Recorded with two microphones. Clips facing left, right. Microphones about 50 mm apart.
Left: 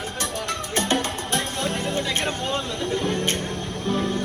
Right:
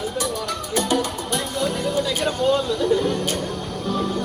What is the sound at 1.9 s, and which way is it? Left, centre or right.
Music, left.